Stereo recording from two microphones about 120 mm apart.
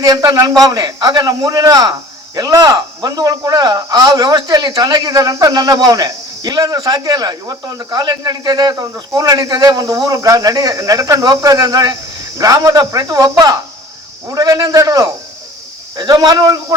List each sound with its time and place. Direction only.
0.0 s a man's voice: 30° right (ahead or behind)